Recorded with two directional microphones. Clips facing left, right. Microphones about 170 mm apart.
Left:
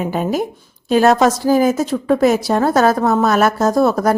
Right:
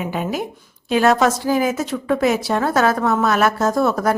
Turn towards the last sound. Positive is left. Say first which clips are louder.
# left 4 dB
turn(degrees=35)  # may be behind; listen again after turning